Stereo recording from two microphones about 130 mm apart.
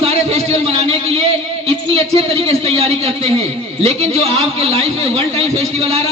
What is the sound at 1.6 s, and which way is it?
A man's voice, 50° right (ahead or behind).